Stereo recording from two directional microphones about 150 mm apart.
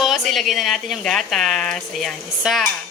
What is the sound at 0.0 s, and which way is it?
Speech, centre (ahead or behind).